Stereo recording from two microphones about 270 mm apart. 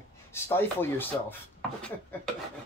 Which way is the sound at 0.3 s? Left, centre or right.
Centre.